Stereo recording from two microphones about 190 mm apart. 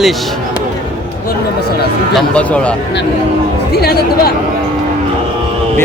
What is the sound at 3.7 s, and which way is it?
Speech, 60° left (ahead or behind).